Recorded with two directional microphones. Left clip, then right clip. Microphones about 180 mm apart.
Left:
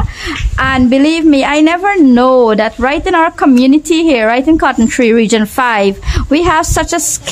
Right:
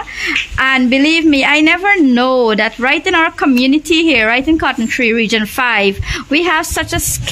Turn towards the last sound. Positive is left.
turn(degrees=40)  # may be behind; listen again after turning